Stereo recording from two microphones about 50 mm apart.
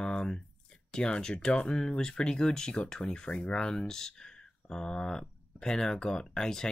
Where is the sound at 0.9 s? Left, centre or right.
Centre.